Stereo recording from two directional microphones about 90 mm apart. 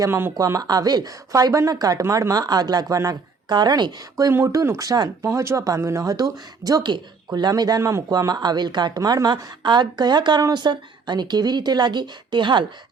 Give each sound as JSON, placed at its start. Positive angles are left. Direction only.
{"t": 0.1, "sound": "speech", "side_deg": -25}
{"t": 0.3, "sound": "speech", "side_deg": -40}
{"t": 4.3, "sound": "speech", "side_deg": -30}
{"t": 7.8, "sound": "speech", "side_deg": -30}
{"t": 8.1, "sound": "speech", "side_deg": -45}
{"t": 9.0, "sound": "speech", "side_deg": -45}